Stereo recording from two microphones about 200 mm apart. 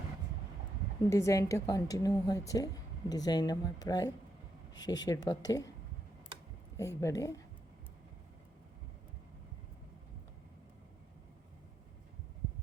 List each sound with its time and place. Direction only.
1.1 s a woman's voice: 15° left (ahead or behind)
6.7 s speech: 15° left (ahead or behind)